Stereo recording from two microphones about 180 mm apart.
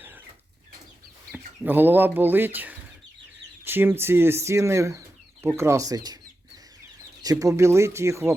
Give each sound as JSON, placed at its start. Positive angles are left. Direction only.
{"t": 1.3, "sound": "speech", "side_deg": -10}
{"t": 7.2, "sound": "speech", "side_deg": -20}